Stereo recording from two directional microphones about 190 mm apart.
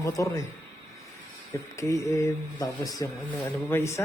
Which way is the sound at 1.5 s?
15° left (ahead or behind).